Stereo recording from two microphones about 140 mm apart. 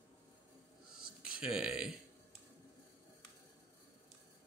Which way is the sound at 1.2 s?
5° right (ahead or behind).